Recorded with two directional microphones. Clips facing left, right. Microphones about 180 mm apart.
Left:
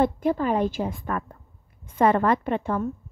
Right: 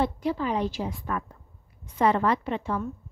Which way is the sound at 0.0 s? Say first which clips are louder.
Left 4 dB; 50° left (ahead or behind).